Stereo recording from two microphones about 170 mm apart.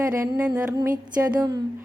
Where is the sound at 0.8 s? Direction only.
20° right (ahead or behind).